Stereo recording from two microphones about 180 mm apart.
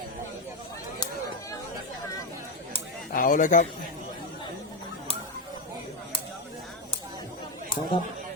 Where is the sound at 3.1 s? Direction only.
50° left (ahead or behind).